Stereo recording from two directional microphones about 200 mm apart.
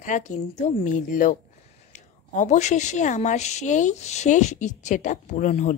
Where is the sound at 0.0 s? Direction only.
40° left (ahead or behind).